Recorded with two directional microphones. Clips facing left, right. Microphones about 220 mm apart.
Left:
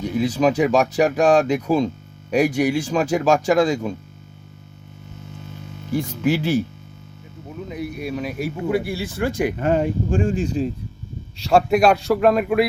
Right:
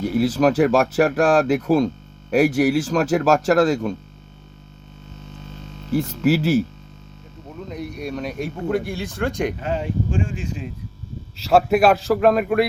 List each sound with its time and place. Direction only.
0.0 s speech: 5° right (ahead or behind)
5.9 s speech: 5° right (ahead or behind)
9.6 s speech: 50° left (ahead or behind); by 10.7 s 35° left (ahead or behind)
11.3 s speech: centre (ahead or behind)